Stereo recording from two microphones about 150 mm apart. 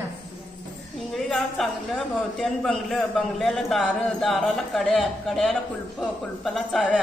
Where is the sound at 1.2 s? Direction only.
5° left (ahead or behind).